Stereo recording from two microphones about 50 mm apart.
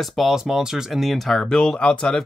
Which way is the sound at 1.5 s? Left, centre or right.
Centre.